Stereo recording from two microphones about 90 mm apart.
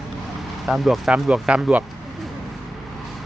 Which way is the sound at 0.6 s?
Centre (ahead or behind).